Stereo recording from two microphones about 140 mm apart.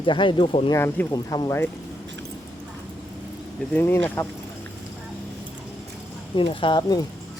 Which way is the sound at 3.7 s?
15° left (ahead or behind).